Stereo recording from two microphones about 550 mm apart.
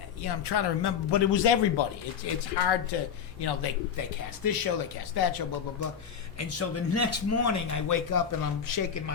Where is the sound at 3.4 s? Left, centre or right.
Left.